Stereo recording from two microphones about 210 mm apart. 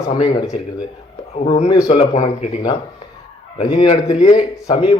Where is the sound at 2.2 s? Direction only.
35° left (ahead or behind).